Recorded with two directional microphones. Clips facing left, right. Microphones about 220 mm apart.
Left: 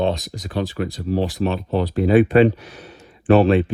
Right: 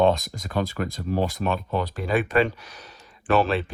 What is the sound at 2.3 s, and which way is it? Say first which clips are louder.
Speech: left 8 dB; 40° left (ahead or behind).